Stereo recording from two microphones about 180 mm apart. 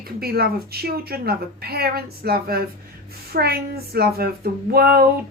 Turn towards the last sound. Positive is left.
turn(degrees=-60)  # may be behind; listen again after turning